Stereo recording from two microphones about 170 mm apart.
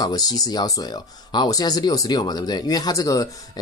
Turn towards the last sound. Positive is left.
turn(degrees=20)  # may be behind; listen again after turning